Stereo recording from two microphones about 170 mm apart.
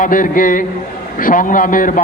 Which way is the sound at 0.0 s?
55° left (ahead or behind).